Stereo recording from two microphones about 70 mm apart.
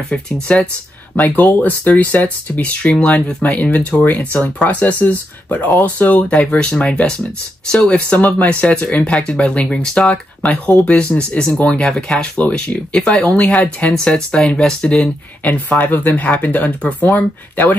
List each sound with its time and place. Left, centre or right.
0.1 s speech: centre